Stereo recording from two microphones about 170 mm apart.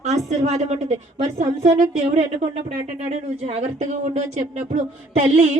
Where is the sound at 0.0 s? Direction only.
40° right (ahead or behind).